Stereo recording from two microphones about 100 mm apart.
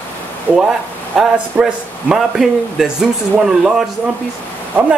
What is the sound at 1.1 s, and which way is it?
A man's voice, 5° right (ahead or behind).